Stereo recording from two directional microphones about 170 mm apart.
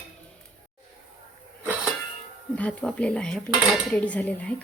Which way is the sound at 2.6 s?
5° left (ahead or behind).